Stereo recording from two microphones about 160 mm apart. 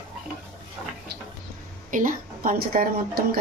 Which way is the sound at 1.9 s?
55° right (ahead or behind).